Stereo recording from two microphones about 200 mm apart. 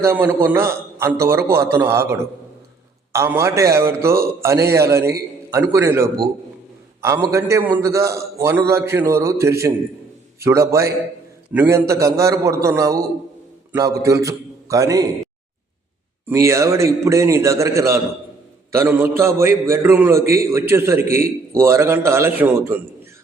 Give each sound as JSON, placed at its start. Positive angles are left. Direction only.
{"t": 0.0, "sound": "a man's voice", "side_deg": -10}
{"t": 16.2, "sound": "a man's voice", "side_deg": -15}